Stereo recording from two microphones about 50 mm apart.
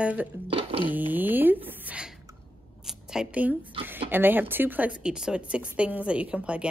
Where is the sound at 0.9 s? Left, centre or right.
Right.